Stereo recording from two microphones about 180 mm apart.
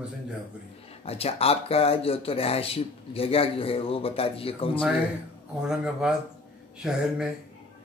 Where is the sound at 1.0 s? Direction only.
35° left (ahead or behind).